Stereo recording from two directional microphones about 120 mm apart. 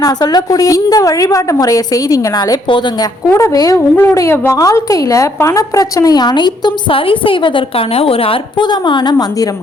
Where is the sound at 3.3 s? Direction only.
25° left (ahead or behind).